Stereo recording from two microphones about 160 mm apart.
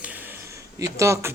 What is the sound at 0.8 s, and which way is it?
Speech, 20° right (ahead or behind).